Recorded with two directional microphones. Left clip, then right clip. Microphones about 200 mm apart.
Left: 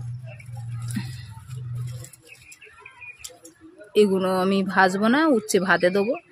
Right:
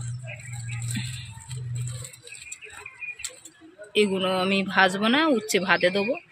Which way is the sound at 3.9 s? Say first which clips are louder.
Left 3 dB; 35° left (ahead or behind).